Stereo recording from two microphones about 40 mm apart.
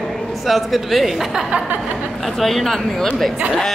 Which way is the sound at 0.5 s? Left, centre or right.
Centre.